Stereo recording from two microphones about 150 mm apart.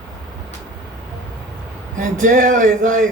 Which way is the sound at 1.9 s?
60° right (ahead or behind).